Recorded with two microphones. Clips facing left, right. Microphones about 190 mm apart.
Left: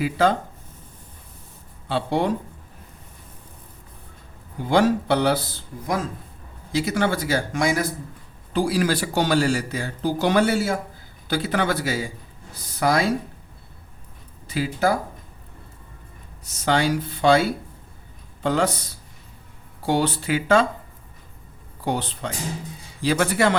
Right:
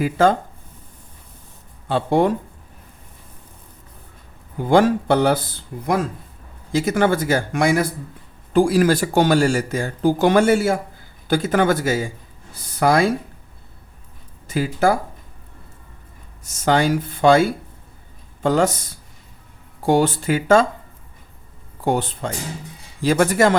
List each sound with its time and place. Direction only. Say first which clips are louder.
0.0 s speech: right 4 dB; 50° right (ahead or behind)
1.9 s speech: right 5 dB; 50° right (ahead or behind)
4.7 s speech: right 4 dB; 50° right (ahead or behind)
14.4 s speech: right 4 dB; 45° right (ahead or behind)
16.4 s speech: right 3 dB; 50° right (ahead or behind)
21.8 s speech: right 5 dB; 50° right (ahead or behind)